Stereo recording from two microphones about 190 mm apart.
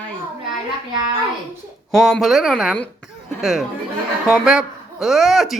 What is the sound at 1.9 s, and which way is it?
Speech, centre (ahead or behind).